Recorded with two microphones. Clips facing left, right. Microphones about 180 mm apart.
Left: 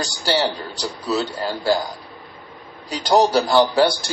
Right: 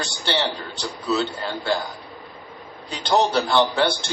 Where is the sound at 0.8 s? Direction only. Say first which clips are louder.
Left 1 dB; 35° left (ahead or behind).